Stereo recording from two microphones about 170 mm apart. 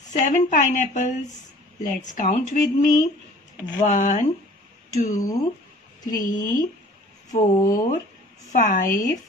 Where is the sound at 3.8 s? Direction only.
45° left (ahead or behind).